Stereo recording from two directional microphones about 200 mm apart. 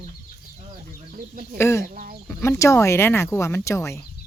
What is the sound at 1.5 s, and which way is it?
Speech, 15° left (ahead or behind).